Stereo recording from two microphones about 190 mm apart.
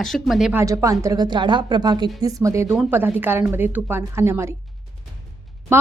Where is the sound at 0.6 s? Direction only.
15° right (ahead or behind).